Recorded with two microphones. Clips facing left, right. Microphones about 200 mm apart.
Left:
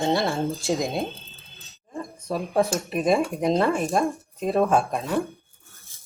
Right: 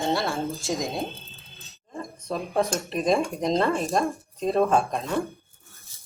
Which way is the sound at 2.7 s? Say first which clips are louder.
Left 2 dB; 5° left (ahead or behind).